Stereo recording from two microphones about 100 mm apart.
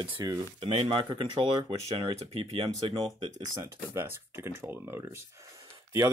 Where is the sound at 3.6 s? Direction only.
25° right (ahead or behind).